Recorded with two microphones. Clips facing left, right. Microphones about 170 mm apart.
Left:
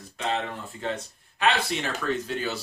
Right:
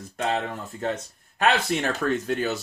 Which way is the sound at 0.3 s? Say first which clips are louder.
Even; 45° right (ahead or behind).